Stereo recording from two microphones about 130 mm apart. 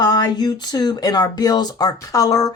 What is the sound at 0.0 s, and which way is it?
Speech, 30° left (ahead or behind).